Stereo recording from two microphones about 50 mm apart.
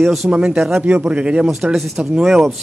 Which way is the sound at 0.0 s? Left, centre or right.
Centre.